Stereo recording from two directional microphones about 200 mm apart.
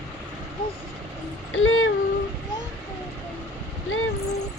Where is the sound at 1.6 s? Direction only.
85° left.